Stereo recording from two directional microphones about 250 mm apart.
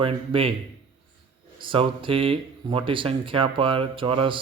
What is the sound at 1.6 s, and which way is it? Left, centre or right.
Speech, centre.